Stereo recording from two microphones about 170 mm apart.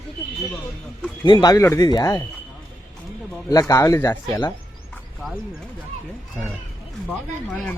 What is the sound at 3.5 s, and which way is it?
Speech, 20° left (ahead or behind).